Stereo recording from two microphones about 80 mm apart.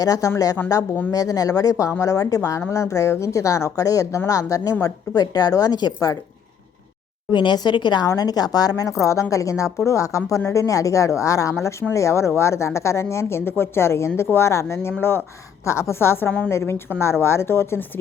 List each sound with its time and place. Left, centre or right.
0.0 s a woman's voice: left
7.3 s speech: left
8.0 s a woman's voice: left